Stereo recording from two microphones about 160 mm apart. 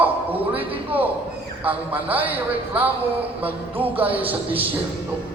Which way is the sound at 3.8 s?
35° right (ahead or behind).